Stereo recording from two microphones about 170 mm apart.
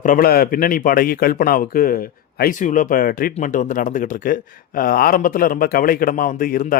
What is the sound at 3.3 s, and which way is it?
Speech, 45° left (ahead or behind).